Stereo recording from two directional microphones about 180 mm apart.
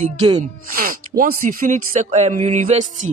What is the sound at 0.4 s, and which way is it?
Speech, 50° right (ahead or behind).